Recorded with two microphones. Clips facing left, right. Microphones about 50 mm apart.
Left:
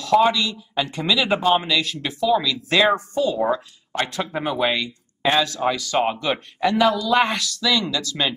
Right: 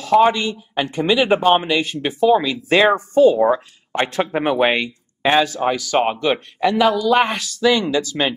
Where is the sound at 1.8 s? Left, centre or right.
Right.